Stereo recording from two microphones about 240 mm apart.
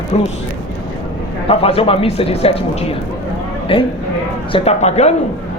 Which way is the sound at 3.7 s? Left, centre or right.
Left.